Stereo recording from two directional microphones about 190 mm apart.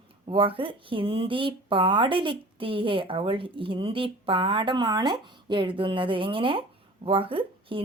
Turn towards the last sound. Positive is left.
turn(degrees=-30)  # may be behind; listen again after turning